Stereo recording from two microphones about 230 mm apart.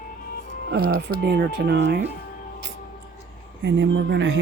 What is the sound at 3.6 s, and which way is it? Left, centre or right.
Speech, right.